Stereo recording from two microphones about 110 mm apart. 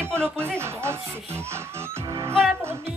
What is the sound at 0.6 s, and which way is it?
Speech, 25° right (ahead or behind).